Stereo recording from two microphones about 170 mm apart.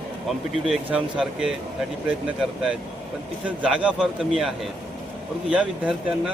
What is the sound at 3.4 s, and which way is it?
Speech, 10° right (ahead or behind).